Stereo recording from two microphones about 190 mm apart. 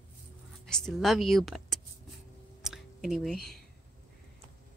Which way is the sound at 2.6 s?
Centre (ahead or behind).